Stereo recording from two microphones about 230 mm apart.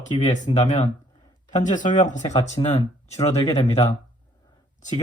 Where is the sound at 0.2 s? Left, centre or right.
Left.